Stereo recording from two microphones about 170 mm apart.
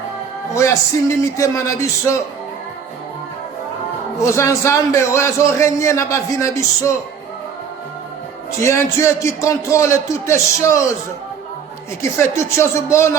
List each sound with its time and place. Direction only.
0.5 s a man's voice: 15° left (ahead or behind)
4.2 s a man's voice: 15° left (ahead or behind)
8.6 s a man's voice: 15° left (ahead or behind)
12.4 s a man's voice: 15° left (ahead or behind)